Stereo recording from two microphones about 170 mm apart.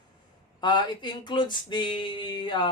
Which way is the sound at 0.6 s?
25° left (ahead or behind).